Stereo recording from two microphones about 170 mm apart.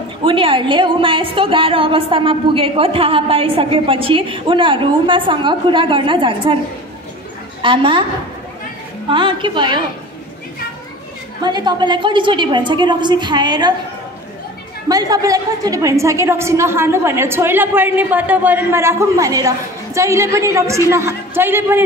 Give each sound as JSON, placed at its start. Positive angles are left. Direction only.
{"t": 0.2, "sound": "a woman's voice", "side_deg": -30}
{"t": 7.6, "sound": "a woman's voice", "side_deg": -30}
{"t": 9.1, "sound": "a woman's voice", "side_deg": -30}
{"t": 11.4, "sound": "a woman's voice", "side_deg": -25}
{"t": 14.9, "sound": "a woman's voice", "side_deg": -20}